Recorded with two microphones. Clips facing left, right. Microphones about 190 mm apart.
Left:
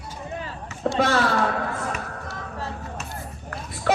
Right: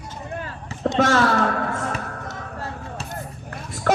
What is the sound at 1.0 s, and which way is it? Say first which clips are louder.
Speech: right 3 dB; 45° right (ahead or behind).